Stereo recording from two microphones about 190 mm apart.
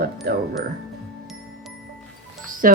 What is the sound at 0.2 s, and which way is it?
Speech, 55° right (ahead or behind).